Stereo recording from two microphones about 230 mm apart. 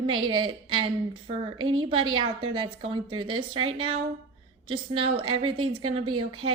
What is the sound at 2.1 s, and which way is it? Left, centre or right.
A woman's voice, right.